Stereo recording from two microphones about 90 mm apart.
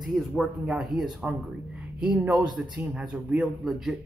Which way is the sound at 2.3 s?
50° right (ahead or behind).